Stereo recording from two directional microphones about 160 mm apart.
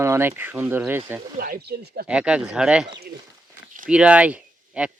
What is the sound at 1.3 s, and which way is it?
Speech, 70° right (ahead or behind).